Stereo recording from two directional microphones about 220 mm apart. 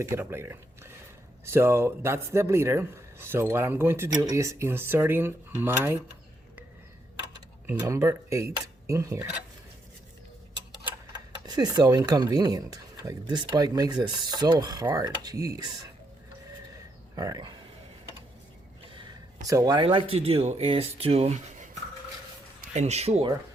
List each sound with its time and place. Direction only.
0.0 s speech: 10° right (ahead or behind)
7.7 s speech: 10° right (ahead or behind)
11.1 s speech: 20° right (ahead or behind)
17.2 s speech: 15° right (ahead or behind)
18.9 s speech: 25° right (ahead or behind)
22.7 s speech: 30° right (ahead or behind)